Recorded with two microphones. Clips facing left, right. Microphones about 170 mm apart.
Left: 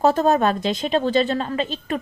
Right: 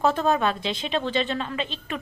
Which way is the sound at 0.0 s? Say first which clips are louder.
Left 5 dB; 40° left (ahead or behind).